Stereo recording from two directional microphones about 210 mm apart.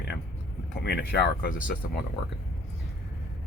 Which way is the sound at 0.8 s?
50° left (ahead or behind).